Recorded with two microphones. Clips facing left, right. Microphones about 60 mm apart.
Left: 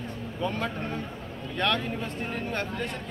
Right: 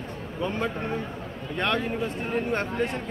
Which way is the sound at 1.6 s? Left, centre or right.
Centre.